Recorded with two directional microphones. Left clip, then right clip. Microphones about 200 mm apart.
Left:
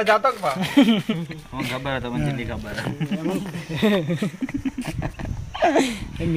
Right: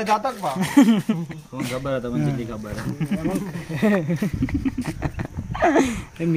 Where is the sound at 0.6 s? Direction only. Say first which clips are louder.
Right 1 dB; 10° right (ahead or behind).